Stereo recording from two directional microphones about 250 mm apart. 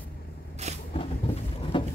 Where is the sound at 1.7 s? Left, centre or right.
Centre.